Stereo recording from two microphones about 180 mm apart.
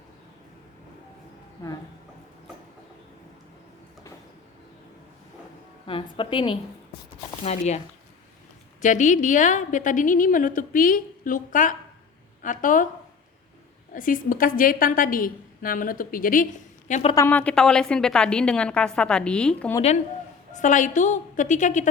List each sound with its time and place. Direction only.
1.6 s a woman's voice: 20° left (ahead or behind)
5.8 s a woman's voice: 30° left (ahead or behind)
8.8 s a woman's voice: 45° left (ahead or behind)
13.9 s a woman's voice: 50° left (ahead or behind)
16.9 s speech: 35° left (ahead or behind)
17.2 s a woman's voice: 10° left (ahead or behind)
20.5 s a woman's voice: 45° left (ahead or behind)